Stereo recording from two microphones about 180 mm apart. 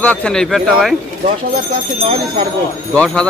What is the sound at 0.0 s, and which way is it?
Speech, 5° left (ahead or behind).